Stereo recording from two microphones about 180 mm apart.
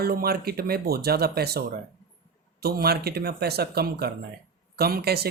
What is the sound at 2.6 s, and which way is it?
Speech, 60° right (ahead or behind).